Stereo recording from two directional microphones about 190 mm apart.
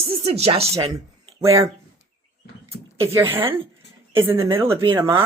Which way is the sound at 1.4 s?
15° right (ahead or behind).